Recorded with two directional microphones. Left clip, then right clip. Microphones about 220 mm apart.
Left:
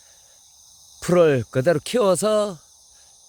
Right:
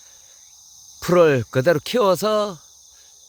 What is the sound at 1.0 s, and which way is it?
Speech, 5° right (ahead or behind).